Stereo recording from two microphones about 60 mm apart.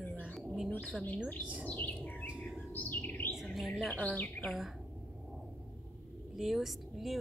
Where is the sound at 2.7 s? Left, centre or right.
Left.